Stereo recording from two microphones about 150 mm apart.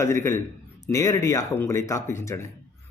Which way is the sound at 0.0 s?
15° left (ahead or behind).